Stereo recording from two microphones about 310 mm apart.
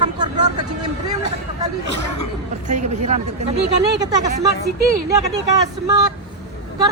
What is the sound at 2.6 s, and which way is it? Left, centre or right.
Speech, right.